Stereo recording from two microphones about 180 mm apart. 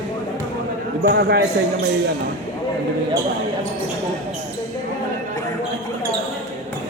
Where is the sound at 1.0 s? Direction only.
65° right (ahead or behind).